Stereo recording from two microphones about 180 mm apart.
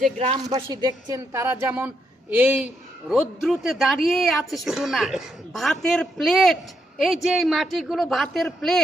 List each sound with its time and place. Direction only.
0.4 s a woman's voice: 25° right (ahead or behind); by 8.8 s centre (ahead or behind)